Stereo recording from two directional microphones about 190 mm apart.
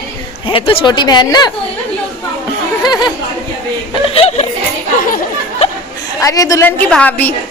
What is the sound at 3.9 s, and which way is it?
Snicker, 30° left (ahead or behind).